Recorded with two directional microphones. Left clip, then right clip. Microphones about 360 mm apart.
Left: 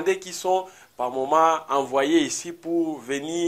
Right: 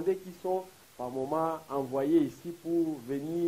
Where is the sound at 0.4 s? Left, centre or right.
Centre.